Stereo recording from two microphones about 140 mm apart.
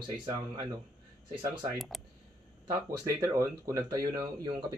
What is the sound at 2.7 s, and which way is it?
Speech, 25° right (ahead or behind).